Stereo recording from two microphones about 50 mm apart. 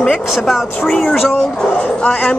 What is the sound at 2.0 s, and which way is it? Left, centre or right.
Speech, left.